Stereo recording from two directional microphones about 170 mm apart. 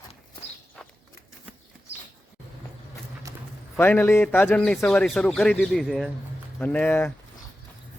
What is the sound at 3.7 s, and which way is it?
Speech, 10° left (ahead or behind).